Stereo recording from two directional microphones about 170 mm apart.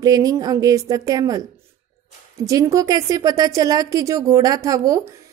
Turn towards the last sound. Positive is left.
turn(degrees=-20)  # may be behind; listen again after turning